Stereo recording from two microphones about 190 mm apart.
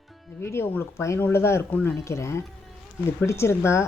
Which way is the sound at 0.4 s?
15° left (ahead or behind).